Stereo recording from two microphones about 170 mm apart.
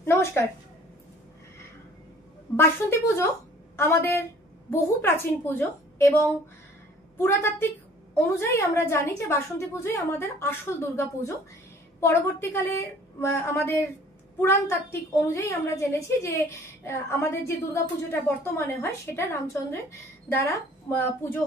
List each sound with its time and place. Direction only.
0.0 s a sound: 15° left (ahead or behind)
2.5 s a woman's voice: 15° left (ahead or behind)
7.2 s a woman's voice: 15° left (ahead or behind)